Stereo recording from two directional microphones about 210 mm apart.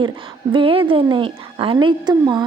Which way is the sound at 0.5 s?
25° right (ahead or behind).